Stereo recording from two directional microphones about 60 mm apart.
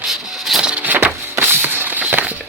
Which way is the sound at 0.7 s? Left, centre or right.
Right.